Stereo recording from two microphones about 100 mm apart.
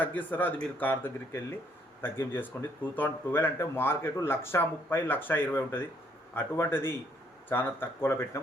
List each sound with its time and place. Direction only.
0.0 s speech: 20° left (ahead or behind)